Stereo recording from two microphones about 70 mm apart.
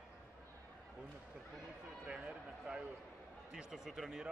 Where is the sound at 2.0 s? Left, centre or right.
Centre.